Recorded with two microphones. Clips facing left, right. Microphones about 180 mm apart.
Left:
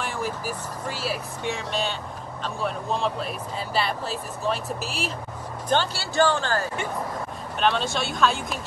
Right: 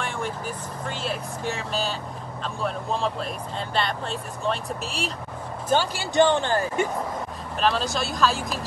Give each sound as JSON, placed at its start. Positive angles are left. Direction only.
{"t": 0.0, "sound": "speech", "side_deg": 5}
{"t": 5.7, "sound": "speech", "side_deg": -10}
{"t": 7.6, "sound": "speech", "side_deg": 0}